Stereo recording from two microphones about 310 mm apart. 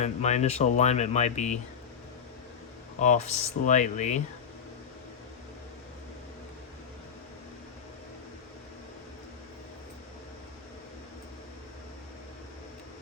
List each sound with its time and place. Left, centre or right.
0.0 s speech: left
3.0 s speech: left